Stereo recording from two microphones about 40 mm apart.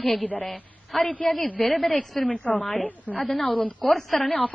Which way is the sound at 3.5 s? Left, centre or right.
Left.